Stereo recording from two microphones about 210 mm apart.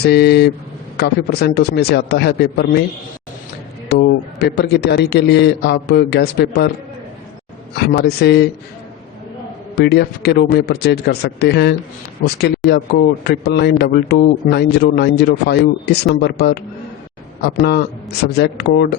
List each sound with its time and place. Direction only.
0.0 s speech: 50° left (ahead or behind)
3.8 s speech: 50° left (ahead or behind)
7.8 s speech: 50° left (ahead or behind)
9.7 s speech: 50° left (ahead or behind)
17.6 s speech: 50° left (ahead or behind)